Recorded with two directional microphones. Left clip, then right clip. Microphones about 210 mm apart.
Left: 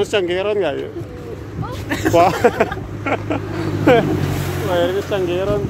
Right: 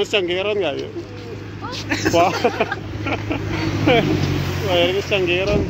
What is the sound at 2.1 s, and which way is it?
Speech, 20° left (ahead or behind).